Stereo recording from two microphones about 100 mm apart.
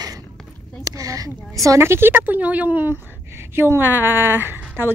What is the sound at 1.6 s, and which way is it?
A woman's voice, 30° right (ahead or behind).